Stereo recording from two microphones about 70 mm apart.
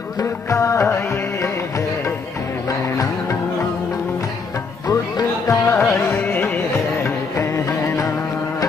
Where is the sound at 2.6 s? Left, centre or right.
Left.